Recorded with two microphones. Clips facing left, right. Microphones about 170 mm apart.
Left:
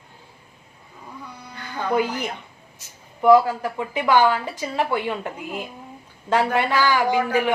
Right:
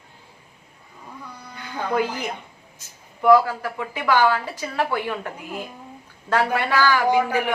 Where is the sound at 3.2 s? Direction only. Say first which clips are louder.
Left 1 dB; 20° left (ahead or behind).